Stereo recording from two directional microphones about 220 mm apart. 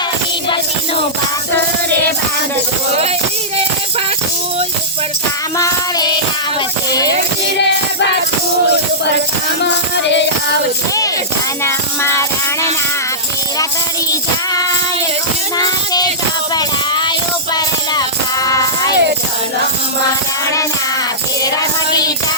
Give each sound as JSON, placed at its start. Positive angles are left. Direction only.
{"t": 5.5, "sound": "child singing", "side_deg": 15}
{"t": 9.6, "sound": "music", "side_deg": 55}
{"t": 14.1, "sound": "music", "side_deg": 15}
{"t": 15.5, "sound": "child singing", "side_deg": 15}
{"t": 16.6, "sound": "music", "side_deg": 20}